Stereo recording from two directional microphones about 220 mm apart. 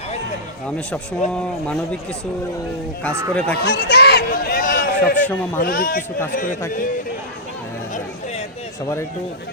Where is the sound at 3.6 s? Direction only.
50° left (ahead or behind).